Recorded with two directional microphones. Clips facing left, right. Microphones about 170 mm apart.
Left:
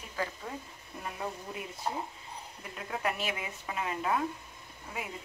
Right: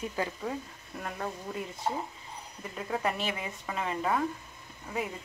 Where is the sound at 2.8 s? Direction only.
5° left (ahead or behind).